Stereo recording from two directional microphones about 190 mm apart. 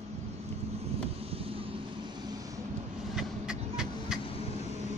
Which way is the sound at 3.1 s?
Centre (ahead or behind).